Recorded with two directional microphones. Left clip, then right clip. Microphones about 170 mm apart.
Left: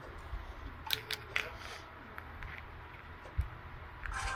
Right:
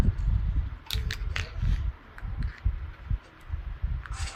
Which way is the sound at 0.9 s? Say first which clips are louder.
Right 1 dB; 10° right (ahead or behind).